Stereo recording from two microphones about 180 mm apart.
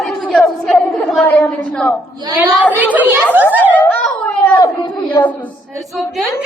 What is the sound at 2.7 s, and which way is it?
Speech, 10° right (ahead or behind).